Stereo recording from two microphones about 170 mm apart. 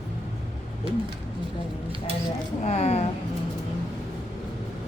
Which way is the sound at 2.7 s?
40° left (ahead or behind).